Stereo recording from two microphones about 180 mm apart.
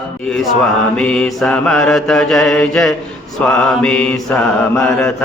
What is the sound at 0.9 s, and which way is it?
Mantra, 5° left (ahead or behind).